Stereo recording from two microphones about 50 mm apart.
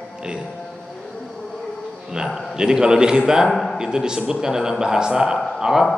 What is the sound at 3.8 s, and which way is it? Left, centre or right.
A man's voice, centre.